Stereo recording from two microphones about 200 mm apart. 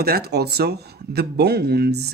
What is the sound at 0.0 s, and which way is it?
Speech, 50° right (ahead or behind).